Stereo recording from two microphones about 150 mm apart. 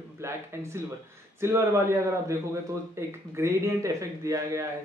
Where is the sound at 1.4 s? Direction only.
20° right (ahead or behind).